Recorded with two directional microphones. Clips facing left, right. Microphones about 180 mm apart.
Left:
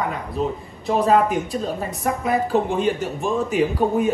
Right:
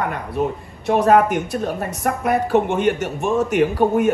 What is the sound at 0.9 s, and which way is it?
A woman's voice, 65° right (ahead or behind).